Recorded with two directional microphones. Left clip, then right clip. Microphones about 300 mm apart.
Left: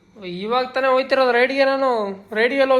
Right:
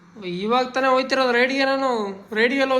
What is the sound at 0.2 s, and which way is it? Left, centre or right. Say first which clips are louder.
A woman's voice: even; centre.